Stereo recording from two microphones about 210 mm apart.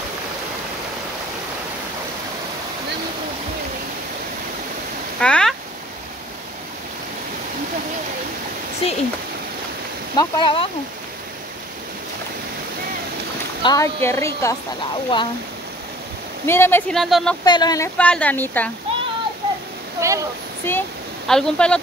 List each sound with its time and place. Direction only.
5.2 s a sound: 5° left (ahead or behind)
8.8 s a sound: 25° left (ahead or behind)
10.1 s speech: 25° left (ahead or behind)
13.6 s a woman's voice: 15° left (ahead or behind)
16.4 s speech: 10° left (ahead or behind)
17.5 s a woman's voice: 20° left (ahead or behind)
20.0 s speech: 15° right (ahead or behind)
20.7 s a woman's voice: 10° left (ahead or behind)